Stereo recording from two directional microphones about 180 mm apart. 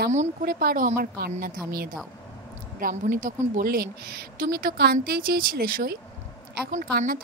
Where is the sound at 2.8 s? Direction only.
50° right (ahead or behind).